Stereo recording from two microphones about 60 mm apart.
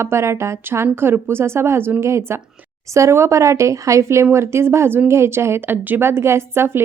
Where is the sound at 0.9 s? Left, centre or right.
Right.